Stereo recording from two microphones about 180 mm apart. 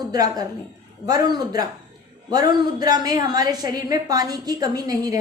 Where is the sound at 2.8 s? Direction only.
20° right (ahead or behind).